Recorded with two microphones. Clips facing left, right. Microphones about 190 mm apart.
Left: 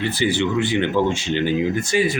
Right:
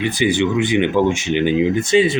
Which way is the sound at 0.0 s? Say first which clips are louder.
Right 3 dB; 15° right (ahead or behind).